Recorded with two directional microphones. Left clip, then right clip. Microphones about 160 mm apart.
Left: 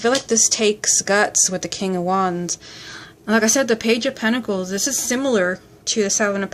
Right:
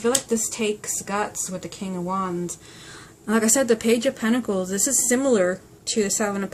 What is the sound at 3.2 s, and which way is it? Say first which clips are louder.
Speech: left 4 dB; 20° left (ahead or behind).